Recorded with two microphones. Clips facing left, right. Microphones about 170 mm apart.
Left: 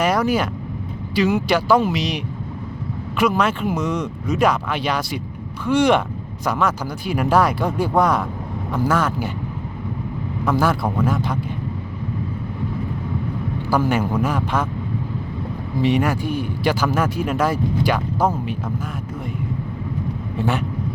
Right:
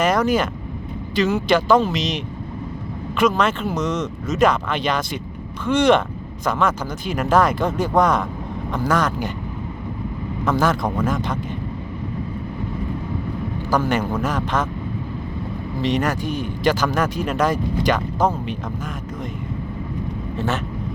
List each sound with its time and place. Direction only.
0.0 s vehicle: 10° left (ahead or behind)
1.1 s a man's voice: 10° left (ahead or behind)
10.4 s a man's voice: 5° left (ahead or behind)
13.7 s speech: 10° left (ahead or behind)
15.8 s speech: 10° left (ahead or behind)
20.3 s speech: 15° left (ahead or behind)